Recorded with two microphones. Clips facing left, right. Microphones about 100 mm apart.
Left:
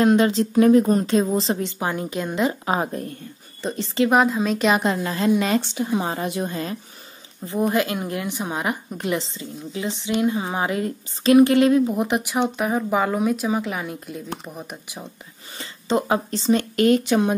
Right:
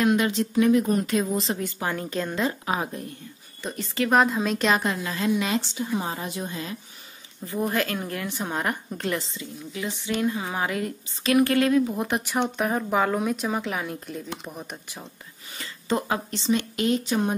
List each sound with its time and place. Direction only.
0.0 s speech: 35° left (ahead or behind); by 2.5 s 15° left (ahead or behind)
2.6 s speech: 35° left (ahead or behind)
4.1 s speech: centre (ahead or behind)
4.8 s speech: 35° left (ahead or behind)
5.3 s speech: 50° left (ahead or behind)
5.8 s speech: 75° left (ahead or behind)
6.5 s speech: 45° left (ahead or behind)
7.4 s speech: 20° left (ahead or behind)
9.2 s speech: 30° left (ahead or behind); by 15.0 s 10° left (ahead or behind)
15.5 s a sound: 25° left (ahead or behind)
16.3 s speech: 40° left (ahead or behind); by 17.4 s 80° left